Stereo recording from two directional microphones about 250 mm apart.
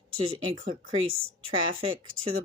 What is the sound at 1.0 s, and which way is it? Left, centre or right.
Speech, right.